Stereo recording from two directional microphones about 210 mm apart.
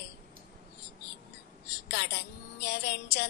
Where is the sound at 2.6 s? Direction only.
55° left (ahead or behind).